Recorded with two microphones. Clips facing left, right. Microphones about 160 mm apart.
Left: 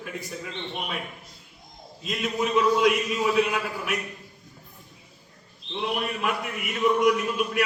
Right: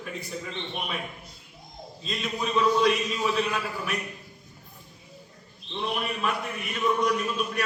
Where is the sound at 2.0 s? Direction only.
5° left (ahead or behind).